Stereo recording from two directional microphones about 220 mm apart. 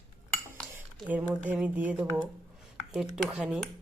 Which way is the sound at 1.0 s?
5° right (ahead or behind).